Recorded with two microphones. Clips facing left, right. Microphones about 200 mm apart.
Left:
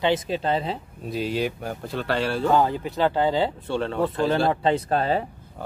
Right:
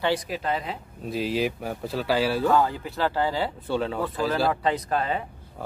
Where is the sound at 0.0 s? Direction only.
25° left (ahead or behind).